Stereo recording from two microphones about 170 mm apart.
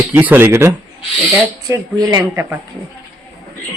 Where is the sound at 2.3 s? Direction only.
10° right (ahead or behind).